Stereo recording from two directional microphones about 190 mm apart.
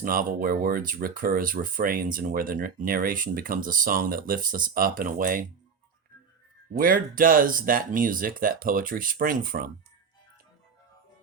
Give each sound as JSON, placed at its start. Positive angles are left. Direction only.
{"t": 0.0, "sound": "speech", "side_deg": -45}
{"t": 6.7, "sound": "speech", "side_deg": -45}